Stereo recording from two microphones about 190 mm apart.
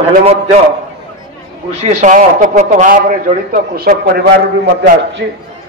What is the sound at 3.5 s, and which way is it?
Speech, 50° right (ahead or behind).